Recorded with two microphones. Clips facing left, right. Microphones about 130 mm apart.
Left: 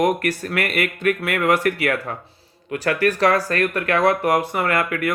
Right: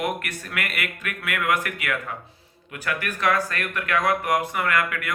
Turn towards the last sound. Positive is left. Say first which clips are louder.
# left 4 dB
turn(degrees=35)  # may be behind; listen again after turning